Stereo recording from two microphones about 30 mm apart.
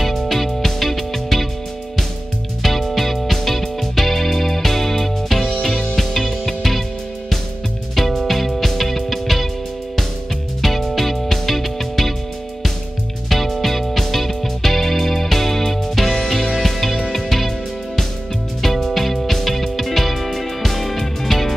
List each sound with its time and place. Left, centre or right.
0.3 s music: centre
2.6 s music: centre
5.9 s music: centre
7.9 s music: centre
10.6 s music: centre
13.3 s music: centre
18.6 s music: centre